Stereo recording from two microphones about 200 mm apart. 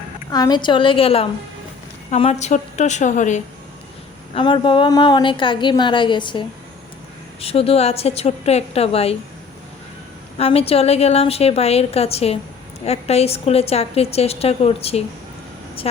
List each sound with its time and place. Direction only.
0.3 s a woman's voice: 20° left (ahead or behind); by 3.4 s 35° left (ahead or behind)
4.4 s a woman's voice: 25° left (ahead or behind)
7.4 s a woman's voice: 30° left (ahead or behind)
10.3 s a woman's voice: 30° left (ahead or behind)